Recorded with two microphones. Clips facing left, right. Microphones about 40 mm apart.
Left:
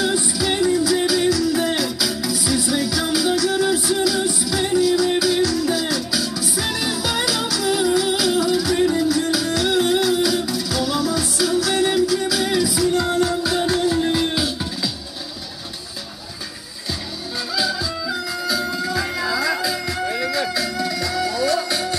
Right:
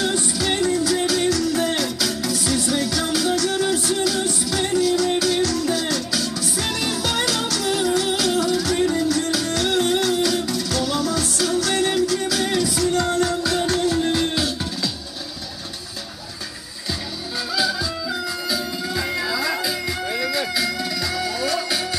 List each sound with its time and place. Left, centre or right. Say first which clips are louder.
0.0 s music: left 2 dB; centre
17.6 s music: even; centre
20.6 s music: left 1 dB; right